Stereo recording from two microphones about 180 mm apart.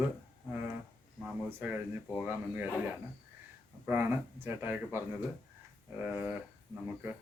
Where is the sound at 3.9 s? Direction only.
10° right (ahead or behind).